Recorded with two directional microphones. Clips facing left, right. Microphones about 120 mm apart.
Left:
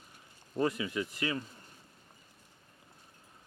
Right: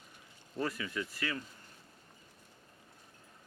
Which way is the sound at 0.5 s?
20° left (ahead or behind).